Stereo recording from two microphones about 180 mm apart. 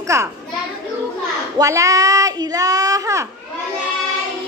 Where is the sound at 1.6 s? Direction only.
20° right (ahead or behind).